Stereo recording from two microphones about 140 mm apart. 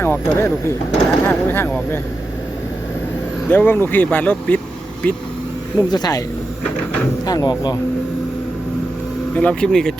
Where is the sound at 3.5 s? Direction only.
15° left (ahead or behind).